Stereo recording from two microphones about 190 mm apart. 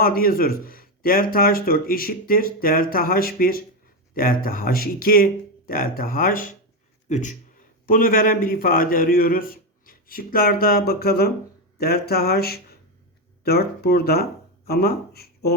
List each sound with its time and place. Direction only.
0.0 s speech: 50° left (ahead or behind)